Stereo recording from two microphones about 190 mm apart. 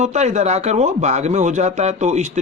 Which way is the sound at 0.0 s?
35° right (ahead or behind).